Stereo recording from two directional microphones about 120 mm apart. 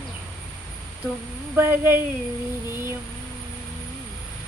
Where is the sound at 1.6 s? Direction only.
20° right (ahead or behind).